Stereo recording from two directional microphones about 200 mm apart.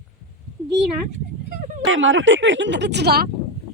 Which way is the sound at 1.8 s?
70° right (ahead or behind).